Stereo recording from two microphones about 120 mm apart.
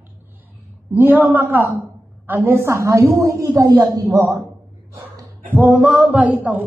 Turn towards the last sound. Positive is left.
turn(degrees=-10)  # may be behind; listen again after turning